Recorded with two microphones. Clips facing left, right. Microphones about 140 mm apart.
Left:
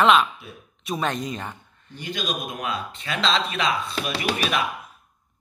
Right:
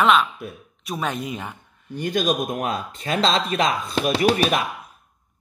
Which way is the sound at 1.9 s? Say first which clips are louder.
Right 8 dB; 50° right (ahead or behind).